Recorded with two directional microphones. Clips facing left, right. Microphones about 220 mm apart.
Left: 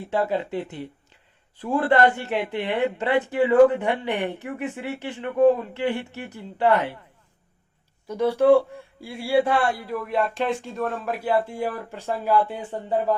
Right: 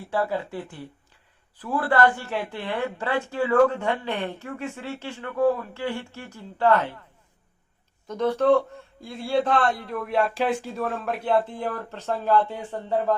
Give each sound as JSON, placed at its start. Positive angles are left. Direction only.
{"t": 0.0, "sound": "speech", "side_deg": 20}
{"t": 8.0, "sound": "speech", "side_deg": 10}